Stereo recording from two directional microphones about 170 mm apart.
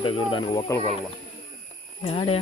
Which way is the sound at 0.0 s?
30° left (ahead or behind).